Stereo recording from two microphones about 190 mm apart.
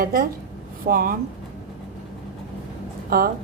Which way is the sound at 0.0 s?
45° right (ahead or behind).